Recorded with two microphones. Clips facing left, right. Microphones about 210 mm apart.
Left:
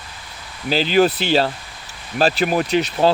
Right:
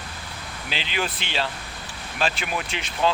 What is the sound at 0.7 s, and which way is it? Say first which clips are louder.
Speech: left 14 dB; 40° left (ahead or behind).